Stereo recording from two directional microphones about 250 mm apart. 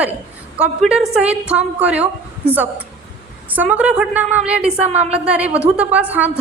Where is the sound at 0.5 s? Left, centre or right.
Centre.